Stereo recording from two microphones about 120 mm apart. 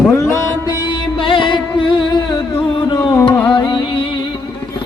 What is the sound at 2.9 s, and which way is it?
Music, 35° left (ahead or behind).